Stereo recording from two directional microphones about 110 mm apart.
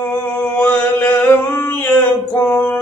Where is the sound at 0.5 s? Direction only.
15° left (ahead or behind).